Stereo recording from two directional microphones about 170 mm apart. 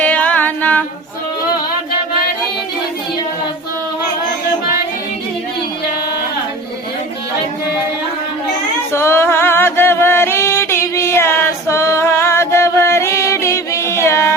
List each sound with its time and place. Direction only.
0.0 s music: 10° left (ahead or behind)
8.9 s music: 15° left (ahead or behind)